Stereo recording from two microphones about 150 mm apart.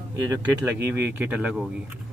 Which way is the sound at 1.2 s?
10° right (ahead or behind).